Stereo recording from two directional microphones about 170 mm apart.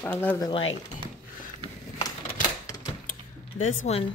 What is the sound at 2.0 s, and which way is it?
Typewriter, 20° left (ahead or behind).